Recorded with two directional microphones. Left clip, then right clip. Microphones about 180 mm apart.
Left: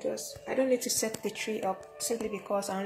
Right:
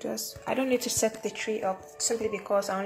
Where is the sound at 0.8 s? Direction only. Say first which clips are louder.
Right 5 dB; 10° right (ahead or behind).